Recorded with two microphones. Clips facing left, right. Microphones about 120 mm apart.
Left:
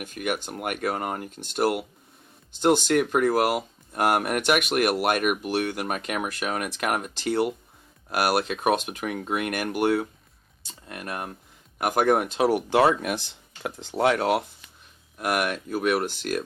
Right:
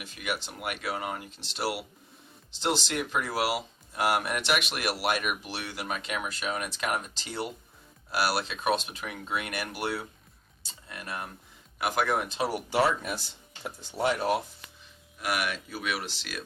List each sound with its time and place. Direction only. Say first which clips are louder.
0.0 s speech: left 6 dB; 50° left (ahead or behind); by 13.1 s 75° left (ahead or behind)
13.6 s speech: left 6 dB; 65° left (ahead or behind)
15.2 s speech: left 5 dB; 50° left (ahead or behind)